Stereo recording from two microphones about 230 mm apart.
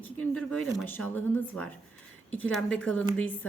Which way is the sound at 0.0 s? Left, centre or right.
Centre.